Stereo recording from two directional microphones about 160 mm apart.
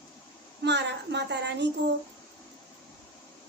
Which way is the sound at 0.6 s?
90° right.